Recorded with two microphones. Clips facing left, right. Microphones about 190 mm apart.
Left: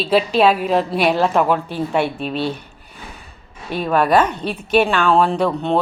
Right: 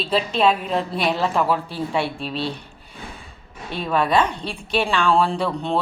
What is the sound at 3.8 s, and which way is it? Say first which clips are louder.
A woman's voice: left 4 dB; 65° left (ahead or behind).